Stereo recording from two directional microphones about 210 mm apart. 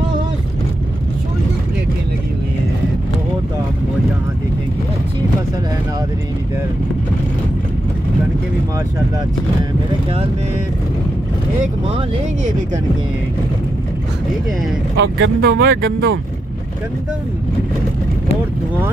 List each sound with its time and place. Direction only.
15.0 s speech: 60° right (ahead or behind)